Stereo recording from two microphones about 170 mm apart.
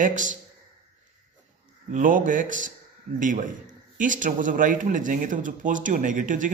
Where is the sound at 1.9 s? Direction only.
50° right (ahead or behind).